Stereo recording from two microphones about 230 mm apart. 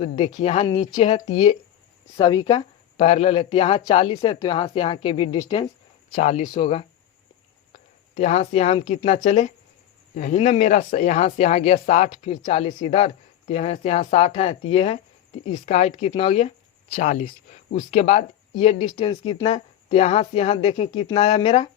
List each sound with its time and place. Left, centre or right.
0.0 s a woman's voice: left
6.1 s a woman's voice: left
8.1 s a woman's voice: left